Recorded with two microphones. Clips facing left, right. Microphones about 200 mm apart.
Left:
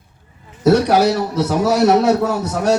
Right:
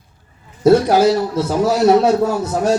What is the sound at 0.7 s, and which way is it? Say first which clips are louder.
A man's voice: right 2 dB; 70° left (ahead or behind).